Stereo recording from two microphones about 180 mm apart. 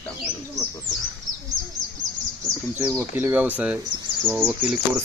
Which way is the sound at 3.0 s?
10° right (ahead or behind).